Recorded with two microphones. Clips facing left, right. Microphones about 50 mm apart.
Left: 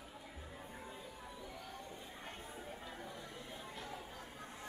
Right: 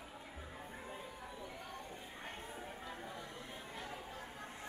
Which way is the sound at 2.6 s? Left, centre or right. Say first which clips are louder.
Right 1 dB; centre.